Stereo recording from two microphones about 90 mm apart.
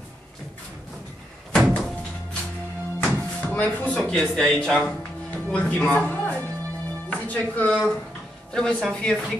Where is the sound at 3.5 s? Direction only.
15° left (ahead or behind).